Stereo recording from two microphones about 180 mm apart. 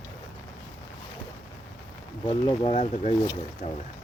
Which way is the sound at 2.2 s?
30° left (ahead or behind).